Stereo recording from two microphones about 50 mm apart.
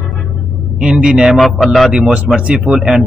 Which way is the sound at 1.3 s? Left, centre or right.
Centre.